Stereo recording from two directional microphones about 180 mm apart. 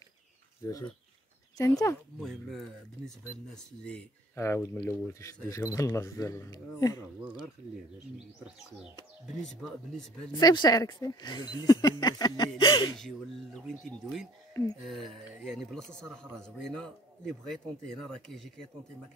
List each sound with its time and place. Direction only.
1.6 s speech: 20° left (ahead or behind)
2.1 s speech: centre (ahead or behind); by 7.4 s 20° left (ahead or behind)
9.4 s speech: centre (ahead or behind)
10.3 s speech: 25° left (ahead or behind)
12.9 s speech: centre (ahead or behind)
14.5 s speech: 20° left (ahead or behind)
14.9 s speech: centre (ahead or behind)